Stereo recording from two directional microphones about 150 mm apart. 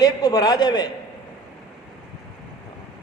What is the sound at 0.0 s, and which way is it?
Speech, 25° left (ahead or behind).